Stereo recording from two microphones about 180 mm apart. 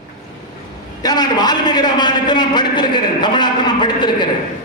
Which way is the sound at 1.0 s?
20° left (ahead or behind).